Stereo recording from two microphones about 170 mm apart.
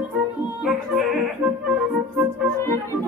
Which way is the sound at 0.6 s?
Centre (ahead or behind).